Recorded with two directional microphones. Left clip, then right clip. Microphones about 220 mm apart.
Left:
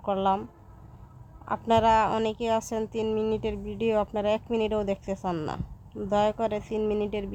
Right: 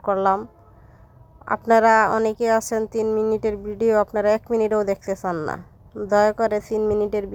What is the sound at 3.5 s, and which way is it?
Speech, 55° right (ahead or behind).